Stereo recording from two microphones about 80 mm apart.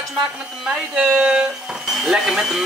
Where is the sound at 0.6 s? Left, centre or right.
Centre.